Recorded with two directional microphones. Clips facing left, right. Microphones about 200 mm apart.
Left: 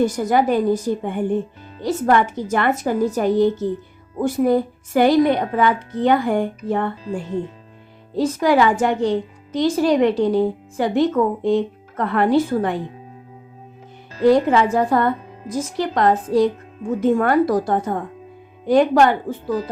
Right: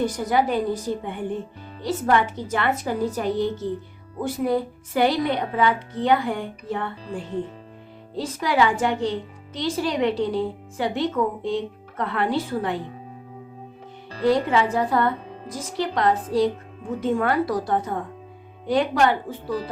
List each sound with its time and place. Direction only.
0.0 s a woman's voice: 45° left (ahead or behind)
14.3 s a woman's voice: 45° left (ahead or behind)